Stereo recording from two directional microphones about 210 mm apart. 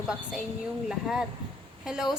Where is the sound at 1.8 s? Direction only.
Centre (ahead or behind).